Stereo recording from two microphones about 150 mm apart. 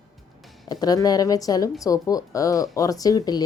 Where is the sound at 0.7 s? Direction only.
25° left (ahead or behind).